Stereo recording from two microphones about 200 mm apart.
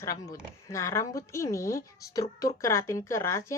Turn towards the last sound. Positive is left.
turn(degrees=15)  # may be behind; listen again after turning